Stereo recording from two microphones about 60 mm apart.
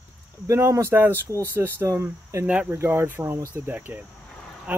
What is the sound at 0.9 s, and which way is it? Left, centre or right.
Speech, right.